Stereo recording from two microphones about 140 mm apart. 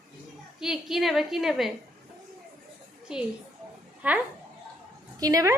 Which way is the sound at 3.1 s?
5° right (ahead or behind).